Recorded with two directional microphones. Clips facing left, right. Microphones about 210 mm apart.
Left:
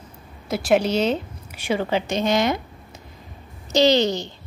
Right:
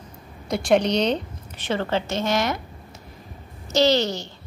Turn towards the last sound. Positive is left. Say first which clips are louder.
# left 2 dB
turn(degrees=20)  # may be behind; listen again after turning